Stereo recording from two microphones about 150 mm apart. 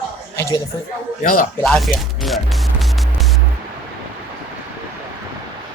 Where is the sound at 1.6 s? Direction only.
Centre (ahead or behind).